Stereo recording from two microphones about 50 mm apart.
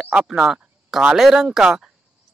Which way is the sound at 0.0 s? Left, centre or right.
Centre.